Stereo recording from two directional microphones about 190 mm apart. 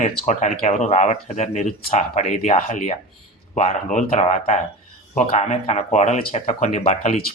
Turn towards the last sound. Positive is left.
turn(degrees=40)  # may be behind; listen again after turning